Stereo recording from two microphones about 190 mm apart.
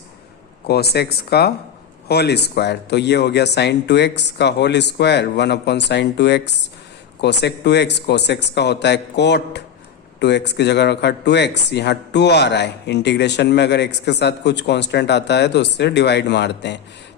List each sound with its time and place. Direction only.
0.7 s speech: 55° left (ahead or behind)